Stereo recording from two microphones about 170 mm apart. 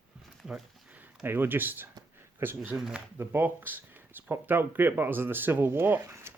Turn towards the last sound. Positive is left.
turn(degrees=-15)  # may be behind; listen again after turning